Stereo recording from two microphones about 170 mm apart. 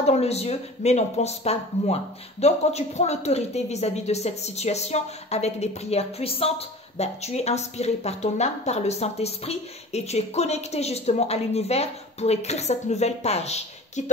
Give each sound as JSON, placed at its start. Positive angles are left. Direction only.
{"t": 0.0, "sound": "speech", "side_deg": 40}